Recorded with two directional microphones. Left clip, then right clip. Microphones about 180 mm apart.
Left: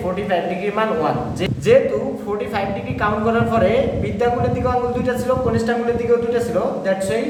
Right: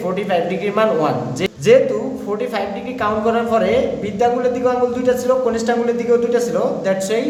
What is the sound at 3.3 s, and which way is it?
A man's voice, 20° right (ahead or behind).